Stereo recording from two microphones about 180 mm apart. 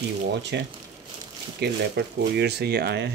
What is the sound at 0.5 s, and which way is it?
Speech, 70° right (ahead or behind).